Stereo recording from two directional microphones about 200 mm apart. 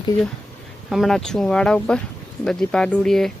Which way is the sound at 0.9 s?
Centre (ahead or behind).